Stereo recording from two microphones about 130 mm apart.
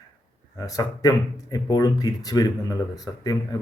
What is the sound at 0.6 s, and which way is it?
A man's voice, 25° left (ahead or behind).